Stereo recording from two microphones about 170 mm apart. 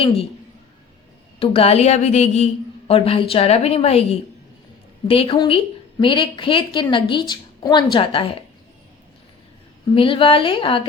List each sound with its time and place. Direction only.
1.4 s a woman's voice: 35° left (ahead or behind)
9.9 s a woman's voice: 30° left (ahead or behind)